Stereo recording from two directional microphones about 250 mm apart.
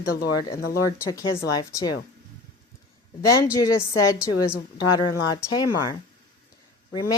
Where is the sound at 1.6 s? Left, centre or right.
Centre.